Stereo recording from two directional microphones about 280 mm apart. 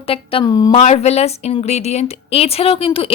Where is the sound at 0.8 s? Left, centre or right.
Left.